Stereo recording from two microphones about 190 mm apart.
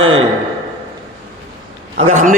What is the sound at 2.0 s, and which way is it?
Speech, 40° right (ahead or behind).